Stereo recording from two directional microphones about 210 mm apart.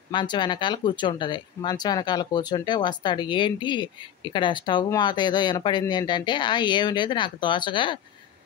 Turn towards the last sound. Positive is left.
turn(degrees=25)  # may be behind; listen again after turning